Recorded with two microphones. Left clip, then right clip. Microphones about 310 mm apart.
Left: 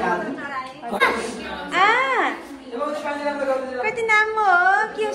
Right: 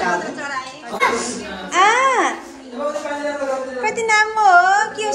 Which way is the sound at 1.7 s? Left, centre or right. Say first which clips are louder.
Right 4 dB; centre.